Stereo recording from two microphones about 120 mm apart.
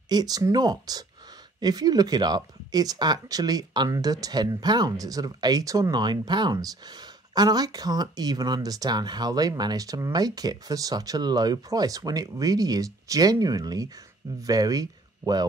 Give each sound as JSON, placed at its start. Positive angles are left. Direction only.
{"t": 0.1, "sound": "speech", "side_deg": -35}